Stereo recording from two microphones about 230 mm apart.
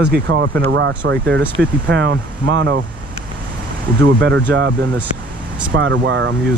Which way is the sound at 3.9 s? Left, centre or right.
Right.